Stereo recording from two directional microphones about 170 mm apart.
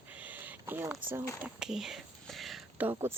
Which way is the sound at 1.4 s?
5° right (ahead or behind).